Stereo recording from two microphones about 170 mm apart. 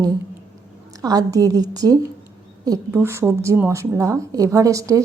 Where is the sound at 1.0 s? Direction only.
20° right (ahead or behind).